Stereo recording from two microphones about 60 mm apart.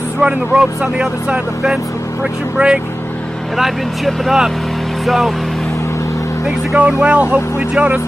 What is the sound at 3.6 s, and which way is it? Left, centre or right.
Speech, centre.